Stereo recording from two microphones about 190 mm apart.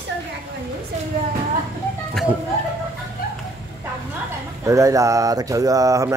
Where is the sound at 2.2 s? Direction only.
Centre (ahead or behind).